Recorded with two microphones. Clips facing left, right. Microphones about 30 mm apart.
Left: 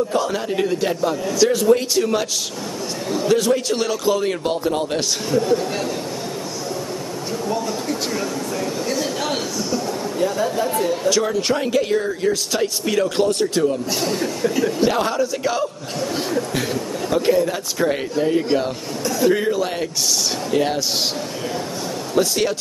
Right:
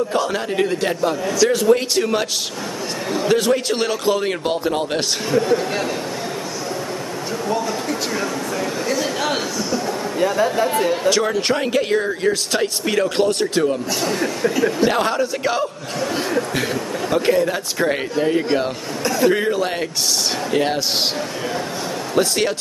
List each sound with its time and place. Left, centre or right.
0.1 s a man's voice: centre
8.8 s a man's voice: centre
11.1 s speech: centre
14.9 s a man's voice: centre
22.1 s a man's voice: centre